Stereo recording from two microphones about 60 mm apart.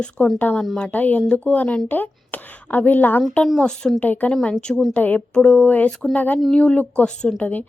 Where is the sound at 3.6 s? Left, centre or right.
Centre.